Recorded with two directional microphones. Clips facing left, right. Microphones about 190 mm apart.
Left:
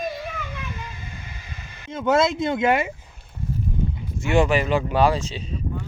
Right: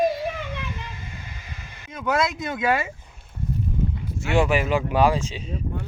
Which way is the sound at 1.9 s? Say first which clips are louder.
Left 4 dB; 25° left (ahead or behind).